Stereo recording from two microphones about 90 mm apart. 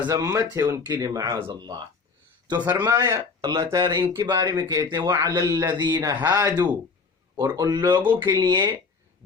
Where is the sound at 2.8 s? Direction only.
35° right (ahead or behind).